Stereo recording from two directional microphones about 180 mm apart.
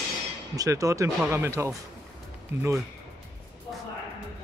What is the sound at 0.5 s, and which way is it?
Speech, 20° right (ahead or behind).